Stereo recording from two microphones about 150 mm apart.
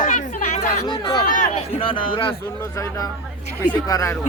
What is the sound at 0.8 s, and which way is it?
Speech, 30° left (ahead or behind).